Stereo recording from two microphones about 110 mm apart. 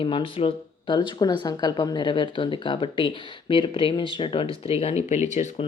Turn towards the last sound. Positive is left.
turn(degrees=90)